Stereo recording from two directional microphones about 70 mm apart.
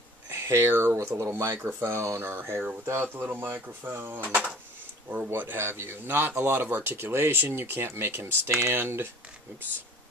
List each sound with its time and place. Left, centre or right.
0.3 s speech: right